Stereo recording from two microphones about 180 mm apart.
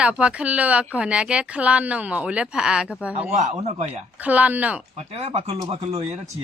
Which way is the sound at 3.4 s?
40° right (ahead or behind).